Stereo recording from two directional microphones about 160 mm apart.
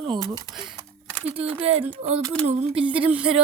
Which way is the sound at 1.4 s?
35° right (ahead or behind).